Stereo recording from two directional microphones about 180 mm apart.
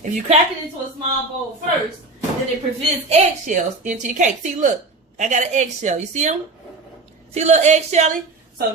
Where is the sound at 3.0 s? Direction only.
40° right (ahead or behind).